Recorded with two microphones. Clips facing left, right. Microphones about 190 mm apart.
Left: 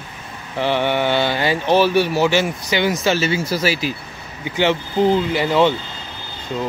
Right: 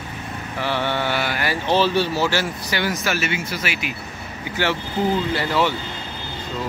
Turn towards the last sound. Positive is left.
turn(degrees=20)  # may be behind; listen again after turning